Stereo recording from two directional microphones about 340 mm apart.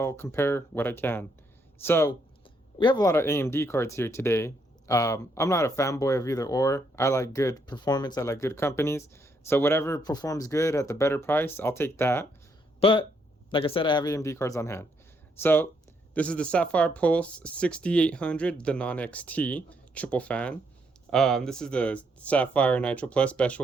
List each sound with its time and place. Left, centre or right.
0.0 s speech: centre